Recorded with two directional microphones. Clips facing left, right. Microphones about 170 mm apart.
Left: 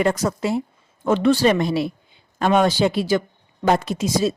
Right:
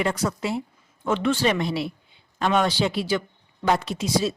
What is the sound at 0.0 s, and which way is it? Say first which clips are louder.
Speech: left 5 dB; 45° left (ahead or behind).